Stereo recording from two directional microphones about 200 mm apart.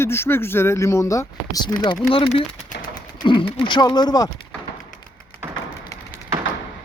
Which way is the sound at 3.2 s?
25° left (ahead or behind).